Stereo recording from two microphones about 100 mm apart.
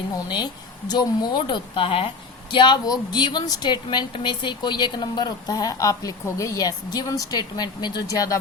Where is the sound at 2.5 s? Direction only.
50° left (ahead or behind).